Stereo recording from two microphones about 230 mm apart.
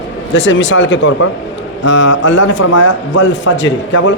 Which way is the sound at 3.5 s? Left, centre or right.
Left.